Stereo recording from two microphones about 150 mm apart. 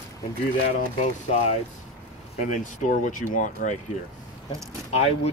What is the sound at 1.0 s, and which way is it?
Speech, 45° left (ahead or behind).